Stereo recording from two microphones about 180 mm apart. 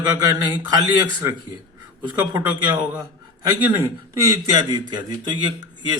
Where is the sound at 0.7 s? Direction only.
20° right (ahead or behind).